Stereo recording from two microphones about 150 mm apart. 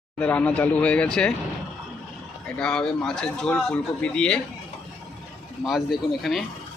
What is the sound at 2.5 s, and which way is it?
Speech, 5° left (ahead or behind).